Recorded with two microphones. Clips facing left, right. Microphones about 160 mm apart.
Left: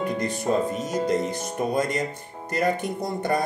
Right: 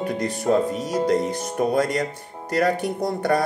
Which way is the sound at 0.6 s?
25° left (ahead or behind).